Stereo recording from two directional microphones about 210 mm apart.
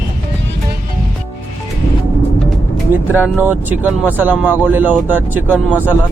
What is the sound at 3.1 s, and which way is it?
Speech, 10° right (ahead or behind).